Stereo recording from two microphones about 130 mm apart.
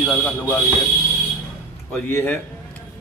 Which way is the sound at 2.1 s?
20° left (ahead or behind).